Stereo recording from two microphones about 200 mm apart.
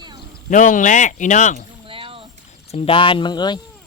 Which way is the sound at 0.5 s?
40° left (ahead or behind).